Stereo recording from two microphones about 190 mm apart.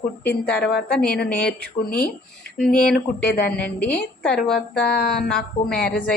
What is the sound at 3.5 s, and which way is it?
A woman's voice, 5° left (ahead or behind).